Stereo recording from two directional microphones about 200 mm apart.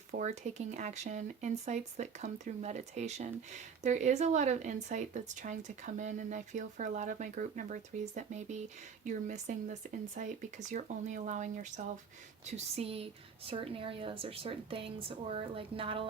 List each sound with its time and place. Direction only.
0.1 s a woman's voice: 40° right (ahead or behind)